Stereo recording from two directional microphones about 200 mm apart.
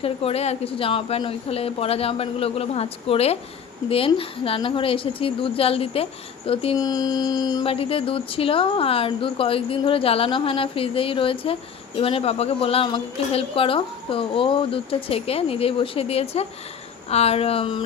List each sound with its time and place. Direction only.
0.0 s a woman's voice: 30° left (ahead or behind)